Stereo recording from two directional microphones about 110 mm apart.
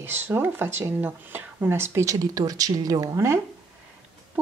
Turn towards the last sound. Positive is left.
turn(degrees=-25)  # may be behind; listen again after turning